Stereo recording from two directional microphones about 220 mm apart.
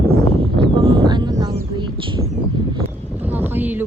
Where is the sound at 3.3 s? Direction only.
10° right (ahead or behind).